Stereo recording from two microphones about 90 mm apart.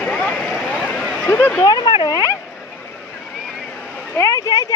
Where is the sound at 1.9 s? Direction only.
60° left (ahead or behind).